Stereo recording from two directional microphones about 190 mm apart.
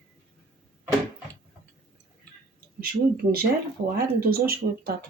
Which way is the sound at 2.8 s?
50° right (ahead or behind).